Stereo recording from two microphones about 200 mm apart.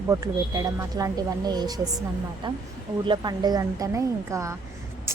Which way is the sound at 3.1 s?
20° right (ahead or behind).